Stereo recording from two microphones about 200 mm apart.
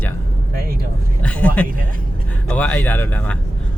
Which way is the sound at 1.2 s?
5° left (ahead or behind).